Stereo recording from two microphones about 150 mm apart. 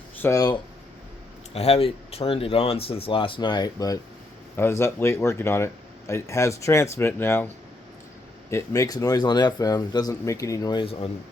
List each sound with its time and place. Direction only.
0.2 s speech: 20° left (ahead or behind)
1.5 s speech: 40° left (ahead or behind)